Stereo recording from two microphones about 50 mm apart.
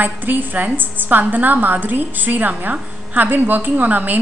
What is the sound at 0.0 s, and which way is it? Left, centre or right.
A woman's voice, right.